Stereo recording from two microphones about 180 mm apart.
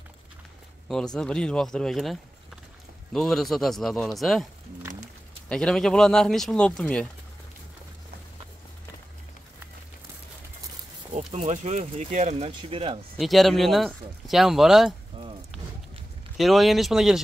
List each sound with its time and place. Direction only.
0.8 s speech: 5° left (ahead or behind)
5.5 s speech: 5° left (ahead or behind)
11.1 s speech: 40° right (ahead or behind)
13.2 s speech: centre (ahead or behind)
15.2 s a sound: 25° right (ahead or behind)
16.3 s speech: centre (ahead or behind)